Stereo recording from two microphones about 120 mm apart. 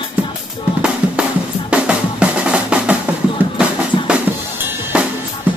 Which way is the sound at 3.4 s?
15° right (ahead or behind).